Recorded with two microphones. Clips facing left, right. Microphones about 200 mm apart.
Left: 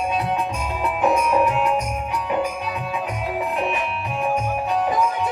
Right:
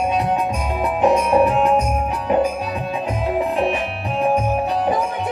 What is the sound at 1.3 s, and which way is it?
Music, 35° right (ahead or behind).